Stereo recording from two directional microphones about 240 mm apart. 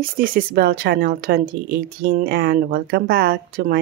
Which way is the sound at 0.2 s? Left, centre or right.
Right.